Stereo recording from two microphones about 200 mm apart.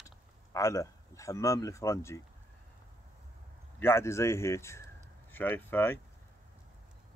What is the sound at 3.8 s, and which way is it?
Speech, 10° left (ahead or behind).